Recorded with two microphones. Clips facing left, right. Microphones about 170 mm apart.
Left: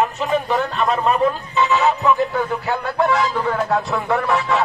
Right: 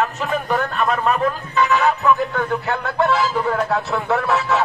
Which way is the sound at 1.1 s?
25° left (ahead or behind).